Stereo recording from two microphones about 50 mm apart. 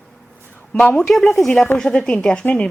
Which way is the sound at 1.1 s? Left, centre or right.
Centre.